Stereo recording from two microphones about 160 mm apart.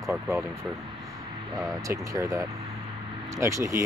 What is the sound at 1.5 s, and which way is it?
Speech, 20° right (ahead or behind).